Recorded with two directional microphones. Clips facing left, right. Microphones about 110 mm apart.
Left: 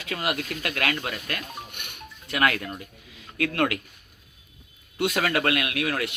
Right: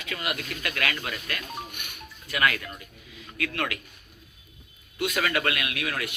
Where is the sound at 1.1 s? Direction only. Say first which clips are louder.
Left 2 dB; 45° left (ahead or behind).